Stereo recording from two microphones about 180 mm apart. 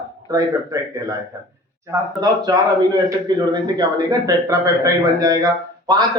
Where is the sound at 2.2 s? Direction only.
20° right (ahead or behind).